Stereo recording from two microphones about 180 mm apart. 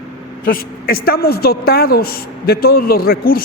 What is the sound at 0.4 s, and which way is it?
A woman's voice, 55° left (ahead or behind).